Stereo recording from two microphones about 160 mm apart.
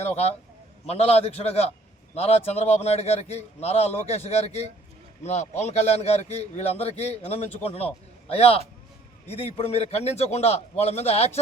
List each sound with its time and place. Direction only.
0.0 s a man's voice: 40° left (ahead or behind)